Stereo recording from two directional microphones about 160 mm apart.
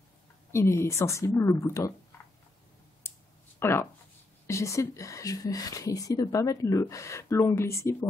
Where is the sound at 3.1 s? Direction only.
15° left (ahead or behind).